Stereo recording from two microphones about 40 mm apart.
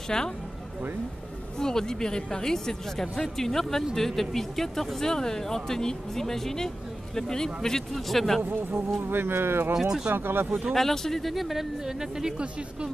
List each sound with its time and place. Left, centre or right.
0.1 s speech: centre
1.6 s speech: centre
9.0 s speech: right
9.8 s speech: centre
10.1 s speech: right
10.7 s speech: centre